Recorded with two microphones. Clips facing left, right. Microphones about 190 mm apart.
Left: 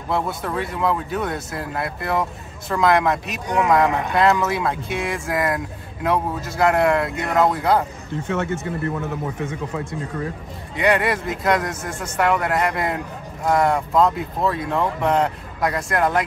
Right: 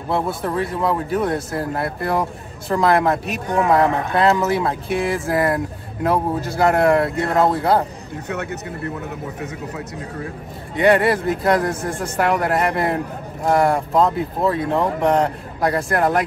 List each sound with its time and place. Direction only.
0.4 s speech: 30° right (ahead or behind)
10.8 s speech: 30° right (ahead or behind)